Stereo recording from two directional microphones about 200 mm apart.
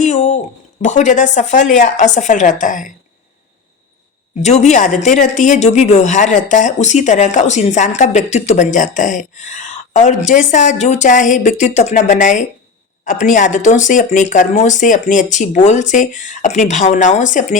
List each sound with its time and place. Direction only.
0.0 s speech: 35° left (ahead or behind)
4.4 s speech: 35° left (ahead or behind)